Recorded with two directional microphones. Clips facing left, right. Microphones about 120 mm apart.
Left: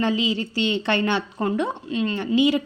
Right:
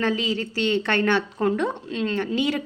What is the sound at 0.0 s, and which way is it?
A woman's voice, 15° left (ahead or behind).